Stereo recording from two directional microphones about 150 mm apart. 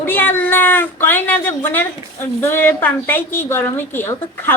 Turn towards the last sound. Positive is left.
turn(degrees=15)  # may be behind; listen again after turning